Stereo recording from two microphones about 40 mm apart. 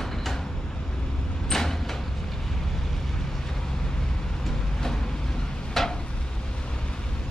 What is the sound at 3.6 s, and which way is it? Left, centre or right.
Train, centre.